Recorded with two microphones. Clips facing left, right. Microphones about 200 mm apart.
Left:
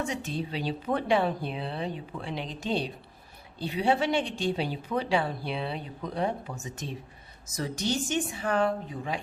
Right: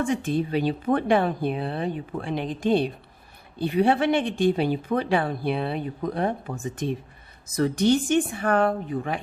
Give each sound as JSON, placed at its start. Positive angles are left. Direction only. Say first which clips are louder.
{"t": 0.0, "sound": "a woman's voice", "louder": "right 8 dB", "side_deg": -55}